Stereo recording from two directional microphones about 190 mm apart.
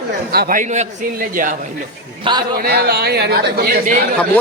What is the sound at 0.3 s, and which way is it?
Speech, 50° right (ahead or behind).